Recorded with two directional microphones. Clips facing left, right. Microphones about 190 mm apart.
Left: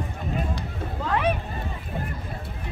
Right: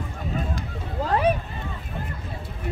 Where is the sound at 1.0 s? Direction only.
35° right (ahead or behind).